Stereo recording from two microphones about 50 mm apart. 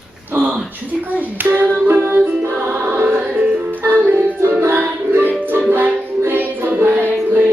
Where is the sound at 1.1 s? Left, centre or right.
Right.